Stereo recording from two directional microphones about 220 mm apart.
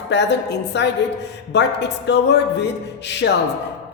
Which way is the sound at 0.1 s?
50° left (ahead or behind).